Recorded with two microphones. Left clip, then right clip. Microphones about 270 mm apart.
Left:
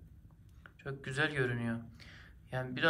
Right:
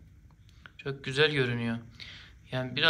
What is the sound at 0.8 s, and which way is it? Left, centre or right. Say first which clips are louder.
Speech: right 8 dB; centre.